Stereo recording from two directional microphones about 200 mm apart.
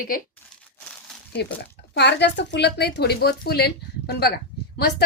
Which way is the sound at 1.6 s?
60° left (ahead or behind).